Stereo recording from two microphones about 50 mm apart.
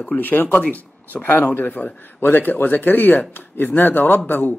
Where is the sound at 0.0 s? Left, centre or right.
Left.